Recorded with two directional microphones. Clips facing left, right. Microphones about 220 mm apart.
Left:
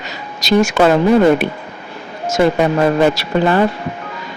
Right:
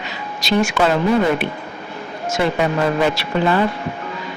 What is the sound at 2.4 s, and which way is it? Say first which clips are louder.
Speech: left 5 dB; 45° left (ahead or behind).